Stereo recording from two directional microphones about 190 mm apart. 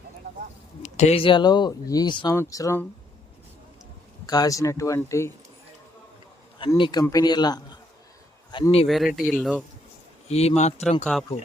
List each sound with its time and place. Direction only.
0.8 s speech: 35° left (ahead or behind); by 2.8 s 15° left (ahead or behind)
4.3 s speech: 20° left (ahead or behind)
6.7 s speech: 25° left (ahead or behind)
8.9 s speech: centre (ahead or behind)
10.2 s speech: 35° left (ahead or behind)
11.0 s speech: centre (ahead or behind)